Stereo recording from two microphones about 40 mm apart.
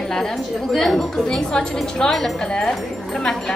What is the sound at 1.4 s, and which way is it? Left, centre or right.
A woman's voice, centre.